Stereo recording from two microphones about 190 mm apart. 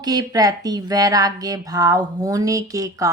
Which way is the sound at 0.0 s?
20° right (ahead or behind).